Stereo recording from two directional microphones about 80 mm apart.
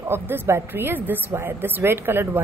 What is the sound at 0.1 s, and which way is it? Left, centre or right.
A woman's voice, right.